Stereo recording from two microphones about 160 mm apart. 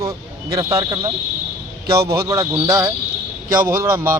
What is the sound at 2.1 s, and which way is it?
A man's voice, 20° right (ahead or behind).